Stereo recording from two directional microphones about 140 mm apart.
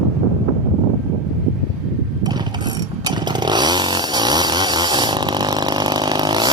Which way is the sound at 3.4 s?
30° right (ahead or behind).